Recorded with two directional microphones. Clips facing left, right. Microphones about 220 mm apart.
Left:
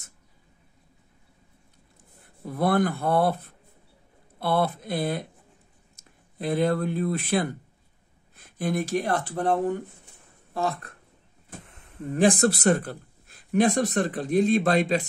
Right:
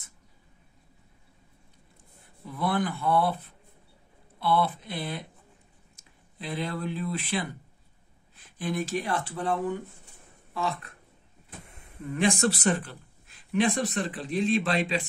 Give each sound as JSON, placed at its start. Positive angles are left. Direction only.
{"t": 2.4, "sound": "speech", "side_deg": 45}
{"t": 6.3, "sound": "speech", "side_deg": 50}
{"t": 12.1, "sound": "speech", "side_deg": 35}
{"t": 12.6, "sound": "speech", "side_deg": 50}